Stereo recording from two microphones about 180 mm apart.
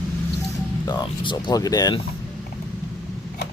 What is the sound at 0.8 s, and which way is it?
Speech, 25° left (ahead or behind).